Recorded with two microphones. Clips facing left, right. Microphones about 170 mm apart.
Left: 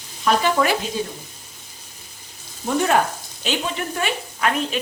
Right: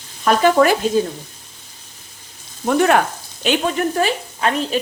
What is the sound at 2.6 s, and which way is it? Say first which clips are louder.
Speech: right 4 dB; 70° right (ahead or behind).